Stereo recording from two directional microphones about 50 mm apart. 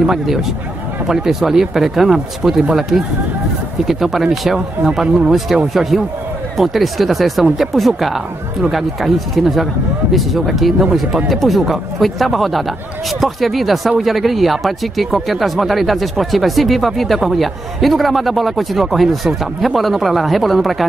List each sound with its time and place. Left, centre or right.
0.0 s speech: centre
11.2 s speech: centre